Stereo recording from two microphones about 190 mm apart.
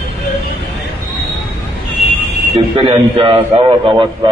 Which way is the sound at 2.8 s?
25° right (ahead or behind).